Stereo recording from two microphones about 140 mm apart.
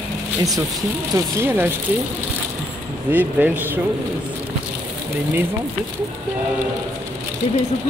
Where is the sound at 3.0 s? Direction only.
10° right (ahead or behind).